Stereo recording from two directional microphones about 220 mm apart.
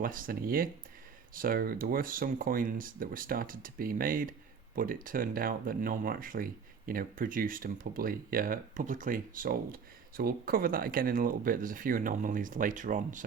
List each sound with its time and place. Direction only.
0.0 s speech: 40° right (ahead or behind)